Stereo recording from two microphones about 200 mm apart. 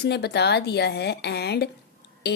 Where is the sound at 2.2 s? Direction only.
55° left (ahead or behind).